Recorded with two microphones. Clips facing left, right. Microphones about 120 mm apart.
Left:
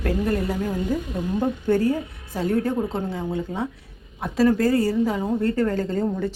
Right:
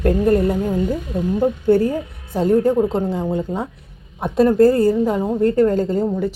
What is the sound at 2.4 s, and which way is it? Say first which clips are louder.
Speech: right 7 dB; 15° right (ahead or behind).